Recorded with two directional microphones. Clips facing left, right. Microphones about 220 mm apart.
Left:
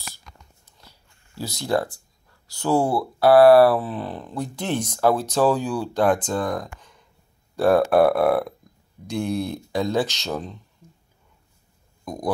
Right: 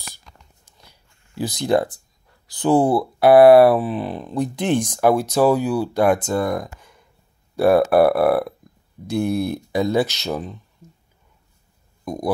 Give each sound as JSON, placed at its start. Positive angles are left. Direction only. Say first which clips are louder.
{"t": 1.4, "sound": "speech", "louder": "right 5 dB", "side_deg": -20}
{"t": 12.0, "sound": "speech", "louder": "right 5 dB", "side_deg": -10}